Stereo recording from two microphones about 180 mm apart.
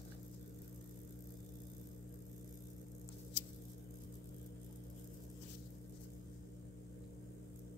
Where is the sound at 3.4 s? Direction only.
80° left.